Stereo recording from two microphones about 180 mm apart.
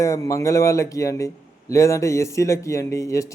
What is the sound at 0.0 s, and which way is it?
A man's voice, 15° left (ahead or behind).